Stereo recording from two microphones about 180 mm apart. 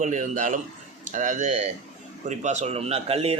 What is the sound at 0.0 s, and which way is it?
A man's voice, 45° right (ahead or behind).